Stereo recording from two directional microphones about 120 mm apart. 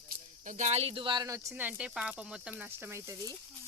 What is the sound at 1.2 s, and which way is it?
Speech, 25° right (ahead or behind).